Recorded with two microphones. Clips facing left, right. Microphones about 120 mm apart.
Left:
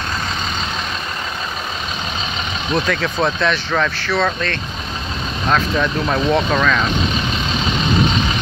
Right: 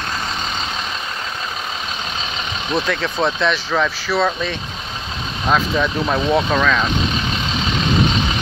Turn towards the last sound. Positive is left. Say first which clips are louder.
# even
turn(degrees=0)  # may be behind; listen again after turning